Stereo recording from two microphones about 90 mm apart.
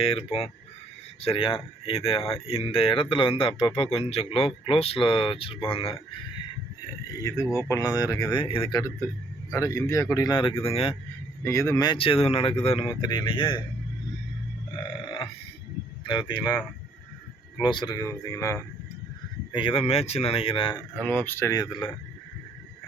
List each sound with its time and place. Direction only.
0.0 s speech: 90° left
7.2 s speech: 35° left (ahead or behind)
8.3 s speech: 70° left (ahead or behind)
9.6 s speech: 35° left (ahead or behind)
10.3 s speech: 80° left
11.4 s speech: 30° left (ahead or behind)
11.9 s speech: 90° left
13.0 s speech: 50° left (ahead or behind)
16.0 s speech: 55° left (ahead or behind)
17.6 s speech: 50° left (ahead or behind); by 18.6 s 35° left (ahead or behind)
19.5 s speech: 80° left
21.0 s speech: 20° left (ahead or behind)
21.5 s speech: 55° left (ahead or behind)